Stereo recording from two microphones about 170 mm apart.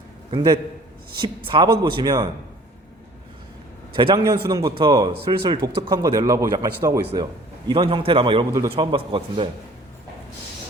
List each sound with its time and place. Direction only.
0.3 s a man's voice: 30° right (ahead or behind)
3.9 s a man's voice: 25° right (ahead or behind)